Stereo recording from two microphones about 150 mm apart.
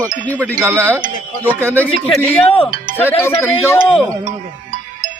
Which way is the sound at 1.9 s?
40° left (ahead or behind).